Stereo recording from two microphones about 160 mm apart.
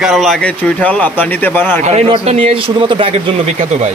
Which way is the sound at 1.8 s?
40° right (ahead or behind).